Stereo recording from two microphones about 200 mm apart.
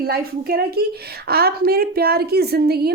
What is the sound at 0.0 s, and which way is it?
Speech, 50° right (ahead or behind).